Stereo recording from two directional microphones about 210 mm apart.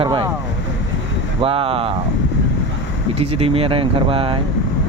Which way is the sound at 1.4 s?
25° right (ahead or behind).